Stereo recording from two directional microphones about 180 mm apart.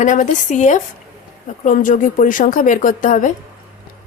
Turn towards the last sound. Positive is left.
turn(degrees=45)  # may be behind; listen again after turning